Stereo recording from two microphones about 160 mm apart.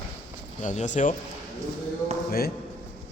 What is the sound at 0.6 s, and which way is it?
Speech, 50° left (ahead or behind).